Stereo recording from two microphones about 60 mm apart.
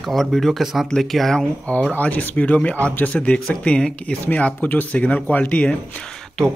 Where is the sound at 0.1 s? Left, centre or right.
Centre.